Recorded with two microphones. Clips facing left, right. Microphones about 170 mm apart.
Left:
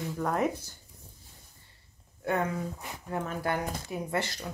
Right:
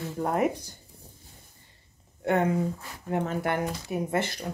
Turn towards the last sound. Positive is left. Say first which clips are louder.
# right 4 dB
turn(degrees=-20)  # may be behind; listen again after turning